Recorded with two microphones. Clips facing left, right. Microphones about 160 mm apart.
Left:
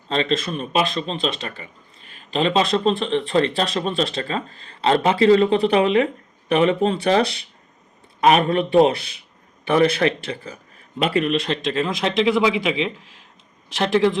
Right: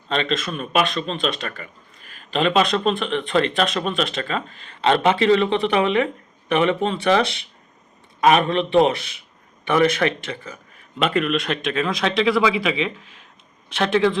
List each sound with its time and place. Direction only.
0.1 s speech: 30° left (ahead or behind)